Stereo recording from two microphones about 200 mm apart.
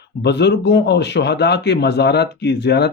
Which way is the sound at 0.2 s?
60° left (ahead or behind).